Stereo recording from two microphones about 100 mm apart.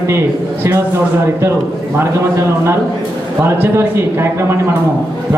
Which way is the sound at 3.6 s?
25° right (ahead or behind).